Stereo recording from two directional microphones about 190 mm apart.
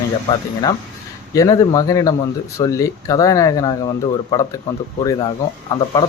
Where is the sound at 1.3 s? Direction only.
20° left (ahead or behind).